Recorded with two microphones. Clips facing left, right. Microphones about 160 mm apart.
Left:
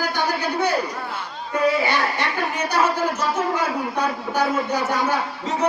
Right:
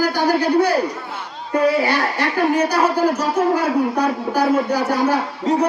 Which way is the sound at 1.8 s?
35° right (ahead or behind).